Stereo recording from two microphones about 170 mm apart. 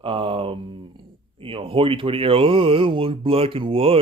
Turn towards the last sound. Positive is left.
turn(degrees=-35)  # may be behind; listen again after turning